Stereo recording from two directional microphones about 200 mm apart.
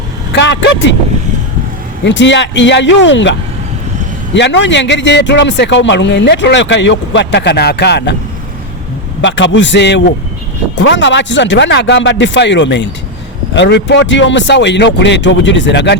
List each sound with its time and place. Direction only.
0.3 s speech: 60° left (ahead or behind)
2.0 s a man's voice: 65° left (ahead or behind)
4.4 s a man's voice: 60° left (ahead or behind)
9.2 s a man's voice: 65° left (ahead or behind)